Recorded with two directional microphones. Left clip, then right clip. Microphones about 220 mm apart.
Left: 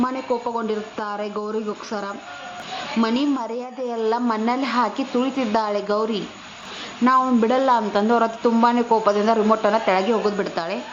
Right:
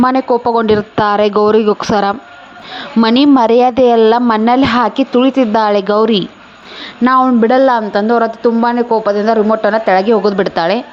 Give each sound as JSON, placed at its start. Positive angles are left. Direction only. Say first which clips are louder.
{"t": 0.0, "sound": "a woman's voice", "louder": "right 12 dB", "side_deg": -40}